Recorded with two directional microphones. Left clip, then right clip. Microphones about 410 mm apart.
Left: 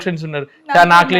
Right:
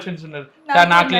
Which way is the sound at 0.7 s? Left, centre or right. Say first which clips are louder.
Left 3 dB; left.